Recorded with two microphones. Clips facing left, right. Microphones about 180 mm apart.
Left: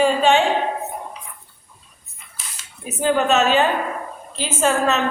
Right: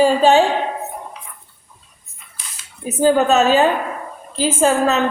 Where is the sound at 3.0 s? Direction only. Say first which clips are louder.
Right 4 dB; 35° right (ahead or behind).